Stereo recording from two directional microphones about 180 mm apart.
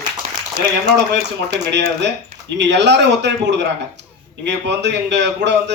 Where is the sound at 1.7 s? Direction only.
75° right (ahead or behind).